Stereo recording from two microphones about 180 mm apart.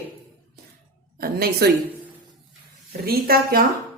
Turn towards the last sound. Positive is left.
turn(degrees=-55)  # may be behind; listen again after turning